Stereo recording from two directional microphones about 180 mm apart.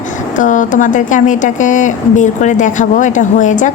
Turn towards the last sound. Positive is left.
turn(degrees=45)  # may be behind; listen again after turning